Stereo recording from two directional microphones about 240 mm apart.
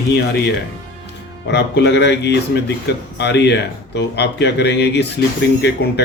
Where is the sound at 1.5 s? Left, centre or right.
Left.